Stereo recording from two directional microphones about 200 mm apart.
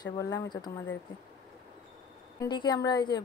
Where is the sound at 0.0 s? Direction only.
20° left (ahead or behind).